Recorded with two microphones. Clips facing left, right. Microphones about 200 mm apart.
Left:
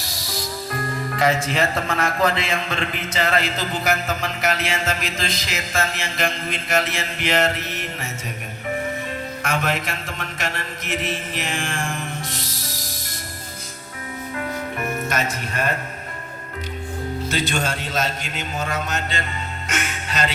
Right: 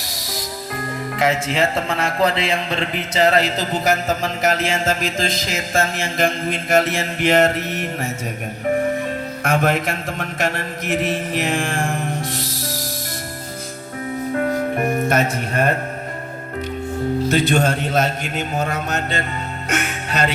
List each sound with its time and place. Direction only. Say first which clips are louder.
0.0 s speech: right 1 dB; 20° right (ahead or behind); by 7.9 s 50° right (ahead or behind)
9.4 s mantra: right 6 dB; 55° right (ahead or behind)
14.3 s music: right 7 dB; 45° right (ahead or behind)
15.0 s a man's voice: right 6 dB; 55° right (ahead or behind)
17.2 s a man's voice: right 7 dB; 60° right (ahead or behind)
19.6 s music: right 5 dB; 60° right (ahead or behind)